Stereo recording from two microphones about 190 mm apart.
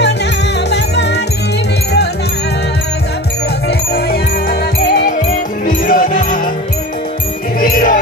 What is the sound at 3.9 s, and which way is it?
Music, 55° left (ahead or behind).